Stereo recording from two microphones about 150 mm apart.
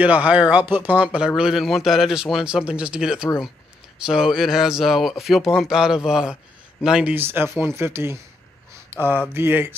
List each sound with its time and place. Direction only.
0.0 s speech: 10° right (ahead or behind)